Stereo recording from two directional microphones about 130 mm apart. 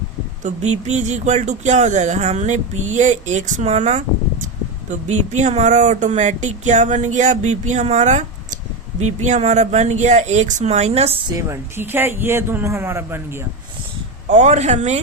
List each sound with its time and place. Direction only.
0.4 s speech: 60° right (ahead or behind)
11.3 s a man's voice: 25° right (ahead or behind)
14.3 s speech: 65° right (ahead or behind)